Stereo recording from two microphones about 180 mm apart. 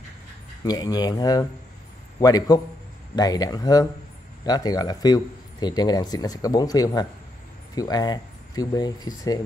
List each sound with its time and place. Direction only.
0.7 s speech: 20° left (ahead or behind)